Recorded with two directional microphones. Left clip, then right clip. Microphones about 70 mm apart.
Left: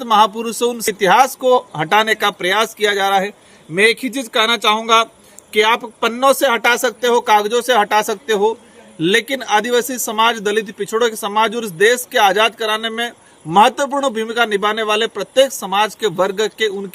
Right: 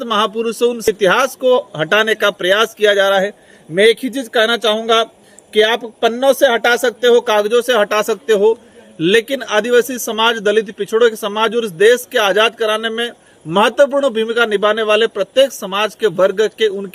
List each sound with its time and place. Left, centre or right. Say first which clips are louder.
0.0 s a man's voice: left 3 dB; left